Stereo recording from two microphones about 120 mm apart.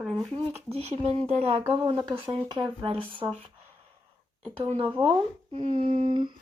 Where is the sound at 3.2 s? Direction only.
30° right (ahead or behind).